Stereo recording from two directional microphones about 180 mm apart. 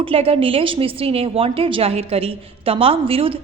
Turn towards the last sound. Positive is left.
turn(degrees=-30)  # may be behind; listen again after turning